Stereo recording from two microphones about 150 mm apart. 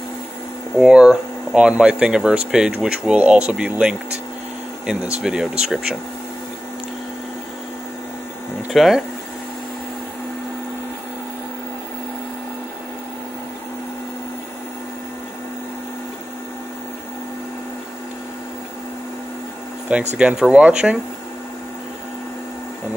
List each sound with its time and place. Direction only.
0.7 s speech: 5° right (ahead or behind)
5.2 s speech: 5° right (ahead or behind)
8.7 s speech: centre (ahead or behind)
20.2 s speech: 5° right (ahead or behind)